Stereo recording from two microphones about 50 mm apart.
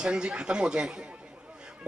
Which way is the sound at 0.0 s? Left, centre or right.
Centre.